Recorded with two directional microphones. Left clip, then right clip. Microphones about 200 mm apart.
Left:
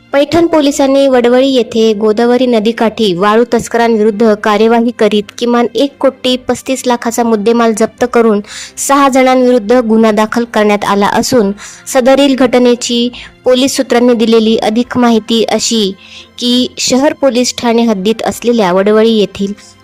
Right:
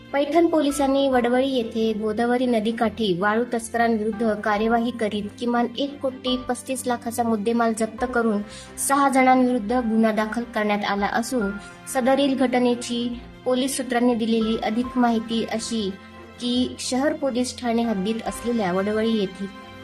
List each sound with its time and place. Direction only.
0.1 s a woman's voice: 55° left (ahead or behind)